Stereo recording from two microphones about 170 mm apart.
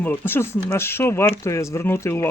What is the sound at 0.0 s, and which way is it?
Speech, 10° left (ahead or behind).